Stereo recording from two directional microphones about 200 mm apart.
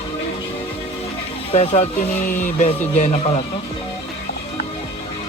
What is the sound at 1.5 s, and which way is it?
Music, 30° left (ahead or behind).